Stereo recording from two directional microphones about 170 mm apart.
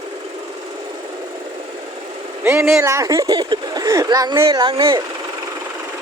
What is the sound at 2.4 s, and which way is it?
Speech, 15° right (ahead or behind).